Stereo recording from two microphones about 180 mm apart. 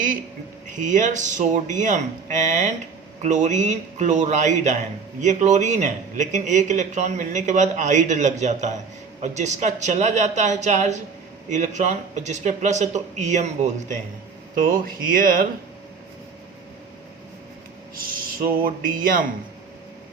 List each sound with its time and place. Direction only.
0.8 s a man's voice: 45° right (ahead or behind)
14.7 s speech: 50° right (ahead or behind)
17.9 s speech: 50° right (ahead or behind)